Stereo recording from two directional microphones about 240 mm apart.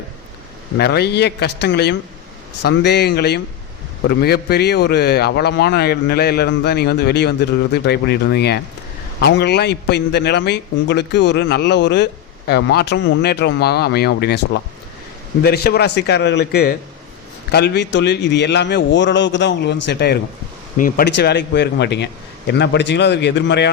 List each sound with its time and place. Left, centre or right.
0.8 s a man's voice: left
20.7 s a man's voice: left